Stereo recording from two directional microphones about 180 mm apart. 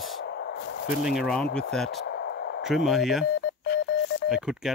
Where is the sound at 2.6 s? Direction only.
Centre (ahead or behind).